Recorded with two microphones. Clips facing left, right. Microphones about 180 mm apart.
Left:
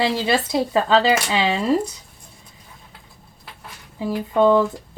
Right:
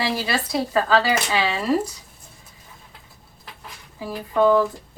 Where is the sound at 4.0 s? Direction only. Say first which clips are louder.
Left 2 dB; 25° left (ahead or behind).